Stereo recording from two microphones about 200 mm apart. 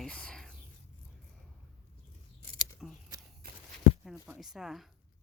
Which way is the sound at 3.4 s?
50° right (ahead or behind).